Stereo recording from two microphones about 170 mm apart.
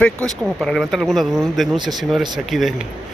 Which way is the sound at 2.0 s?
Centre (ahead or behind).